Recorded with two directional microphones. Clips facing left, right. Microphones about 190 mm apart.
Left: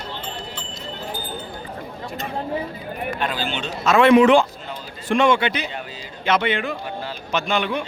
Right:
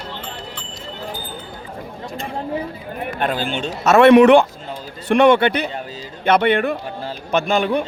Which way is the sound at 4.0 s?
65° right (ahead or behind).